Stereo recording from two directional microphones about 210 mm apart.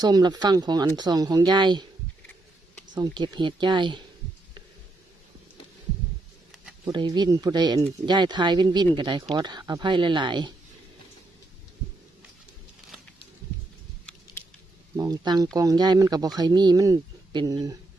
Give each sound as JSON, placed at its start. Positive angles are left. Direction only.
{"t": 0.0, "sound": "speech", "side_deg": -20}
{"t": 2.9, "sound": "speech", "side_deg": -20}
{"t": 6.9, "sound": "speech", "side_deg": -20}
{"t": 14.9, "sound": "speech", "side_deg": -20}